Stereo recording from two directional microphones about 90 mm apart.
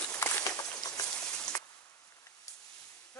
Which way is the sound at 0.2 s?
40° left (ahead or behind).